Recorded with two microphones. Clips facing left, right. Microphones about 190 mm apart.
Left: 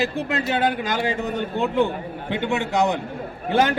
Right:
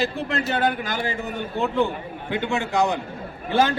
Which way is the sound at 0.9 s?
20° left (ahead or behind).